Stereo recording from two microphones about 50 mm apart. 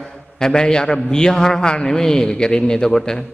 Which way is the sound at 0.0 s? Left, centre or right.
Centre.